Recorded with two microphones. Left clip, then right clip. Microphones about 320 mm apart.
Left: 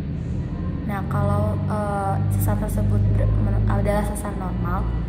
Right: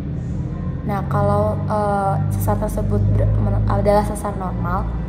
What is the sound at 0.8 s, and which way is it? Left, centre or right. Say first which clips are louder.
Music: right 7 dB; right.